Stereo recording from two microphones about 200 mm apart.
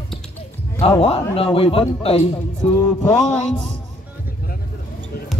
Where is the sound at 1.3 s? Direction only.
30° left (ahead or behind).